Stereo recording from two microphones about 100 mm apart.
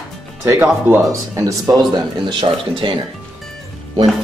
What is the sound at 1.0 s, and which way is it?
Speech, 35° right (ahead or behind).